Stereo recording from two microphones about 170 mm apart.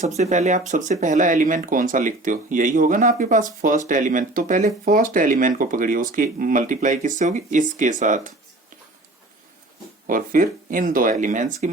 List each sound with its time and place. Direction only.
0.0 s speech: 40° right (ahead or behind)
10.1 s speech: 55° right (ahead or behind)